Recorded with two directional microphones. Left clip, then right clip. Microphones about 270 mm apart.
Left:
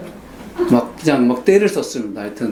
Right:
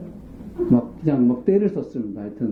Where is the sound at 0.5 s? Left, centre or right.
Centre.